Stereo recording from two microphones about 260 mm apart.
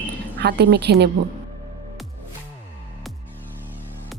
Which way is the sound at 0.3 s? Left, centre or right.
Right.